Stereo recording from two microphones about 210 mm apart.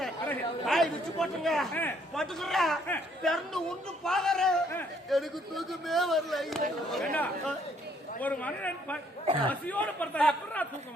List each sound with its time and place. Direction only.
0.0 s a man's voice: centre (ahead or behind)
9.2 s a man's voice: 25° right (ahead or behind)
9.5 s a man's voice: 5° left (ahead or behind)